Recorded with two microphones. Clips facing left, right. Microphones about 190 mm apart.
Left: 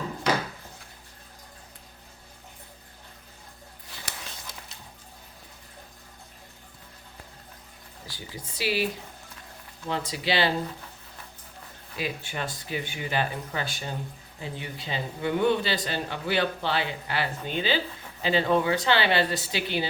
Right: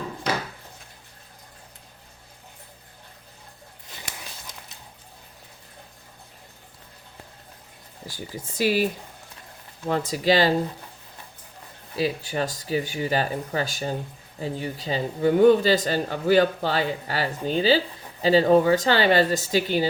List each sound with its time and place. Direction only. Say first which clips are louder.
8.0 s speech: right 6 dB; 45° right (ahead or behind)
11.9 s speech: right 7 dB; 35° right (ahead or behind)